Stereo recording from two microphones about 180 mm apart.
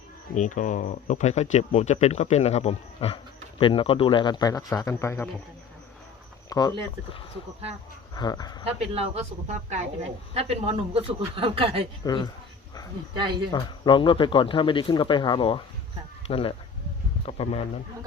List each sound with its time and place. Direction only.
0.3 s speech: 45° left (ahead or behind); by 5.3 s 15° left (ahead or behind)
6.5 s speech: 20° left (ahead or behind)
8.1 s speech: 20° left (ahead or behind)
8.6 s a man's voice: 35° right (ahead or behind)
12.0 s speech: 25° left (ahead or behind)
13.1 s speech: 25° right (ahead or behind)
13.5 s speech: 25° left (ahead or behind)